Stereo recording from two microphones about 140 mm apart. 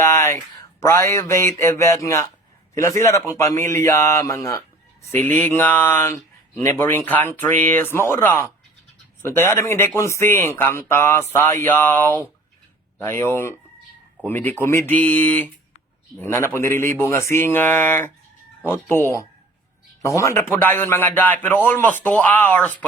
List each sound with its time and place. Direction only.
0.0 s speech: 20° left (ahead or behind)